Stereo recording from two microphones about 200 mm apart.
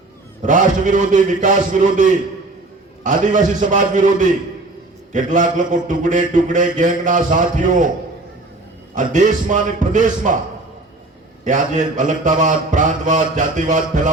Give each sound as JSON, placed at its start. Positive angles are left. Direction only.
{"t": 0.4, "sound": "a man's voice", "side_deg": -40}
{"t": 9.0, "sound": "a man's voice", "side_deg": -40}
{"t": 11.4, "sound": "a man's voice", "side_deg": -40}